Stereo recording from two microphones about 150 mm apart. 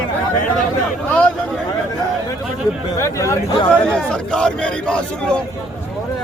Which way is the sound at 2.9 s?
20° left (ahead or behind).